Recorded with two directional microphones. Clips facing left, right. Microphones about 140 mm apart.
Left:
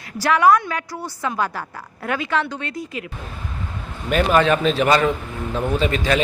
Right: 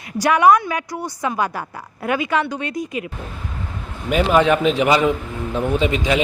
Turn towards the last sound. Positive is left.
turn(degrees=-15)  # may be behind; listen again after turning